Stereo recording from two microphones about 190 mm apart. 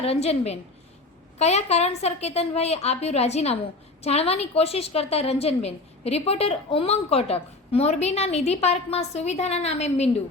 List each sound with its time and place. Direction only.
0.0 s a woman's voice: 30° left (ahead or behind)